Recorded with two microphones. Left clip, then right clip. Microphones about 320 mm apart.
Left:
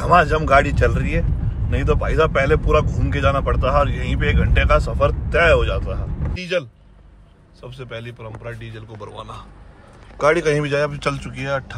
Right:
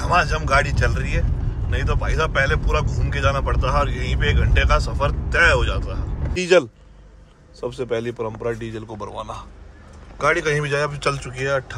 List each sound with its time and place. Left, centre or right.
0.0 s speech: centre
6.4 s a man's voice: right
10.1 s speech: centre